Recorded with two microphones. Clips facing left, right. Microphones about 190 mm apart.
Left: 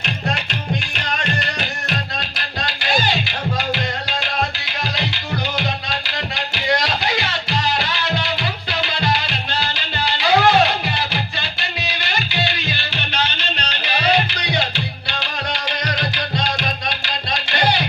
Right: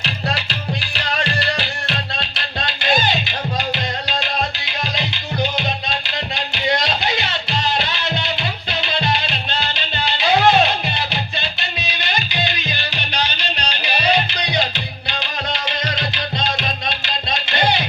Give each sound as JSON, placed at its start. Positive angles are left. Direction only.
{"t": 0.0, "sound": "music", "side_deg": -35}
{"t": 4.9, "sound": "music", "side_deg": -20}
{"t": 15.2, "sound": "music", "side_deg": -25}